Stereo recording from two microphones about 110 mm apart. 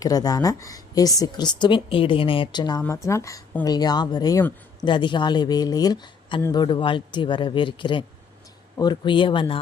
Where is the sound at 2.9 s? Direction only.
30° left (ahead or behind).